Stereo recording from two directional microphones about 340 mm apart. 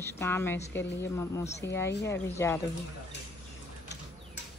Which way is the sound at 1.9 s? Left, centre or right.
Left.